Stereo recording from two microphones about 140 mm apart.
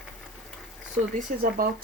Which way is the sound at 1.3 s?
90° right.